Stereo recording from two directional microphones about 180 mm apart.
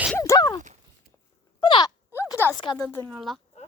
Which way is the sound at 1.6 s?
25° left (ahead or behind).